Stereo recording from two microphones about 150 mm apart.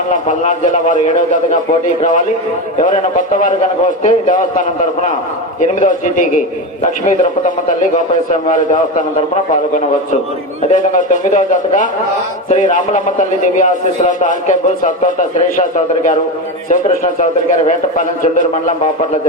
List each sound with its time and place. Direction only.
0.1 s a man's voice: 55° left (ahead or behind)
10.7 s a man's voice: 60° left (ahead or behind)
17.7 s a man's voice: 60° left (ahead or behind)